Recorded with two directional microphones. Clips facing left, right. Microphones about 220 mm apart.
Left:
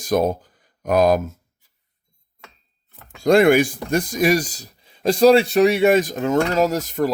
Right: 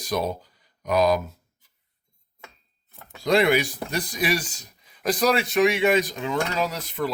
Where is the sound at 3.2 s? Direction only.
50° left (ahead or behind).